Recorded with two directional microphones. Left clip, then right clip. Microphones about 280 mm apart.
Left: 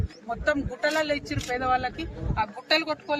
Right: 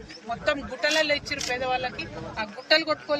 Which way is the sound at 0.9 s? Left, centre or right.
Centre.